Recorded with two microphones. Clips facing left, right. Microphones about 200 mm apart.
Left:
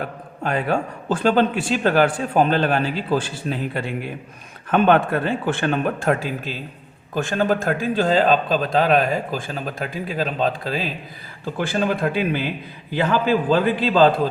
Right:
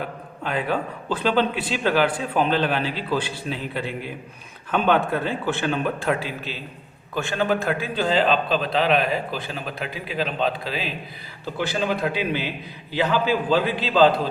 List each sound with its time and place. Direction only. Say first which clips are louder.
0.4 s a man's voice: left 3 dB; 45° left (ahead or behind)